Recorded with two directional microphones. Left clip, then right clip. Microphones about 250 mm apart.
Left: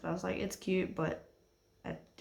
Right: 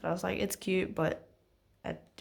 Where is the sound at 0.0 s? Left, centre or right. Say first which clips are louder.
Right 4 dB; right.